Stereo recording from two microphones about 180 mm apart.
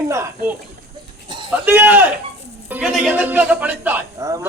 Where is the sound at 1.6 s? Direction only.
10° right (ahead or behind).